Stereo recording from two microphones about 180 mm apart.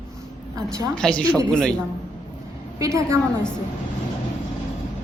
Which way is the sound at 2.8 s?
15° right (ahead or behind).